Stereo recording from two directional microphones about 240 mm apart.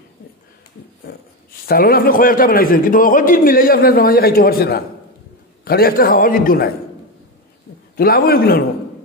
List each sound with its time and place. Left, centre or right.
1.7 s a man's voice: left
7.9 s a man's voice: left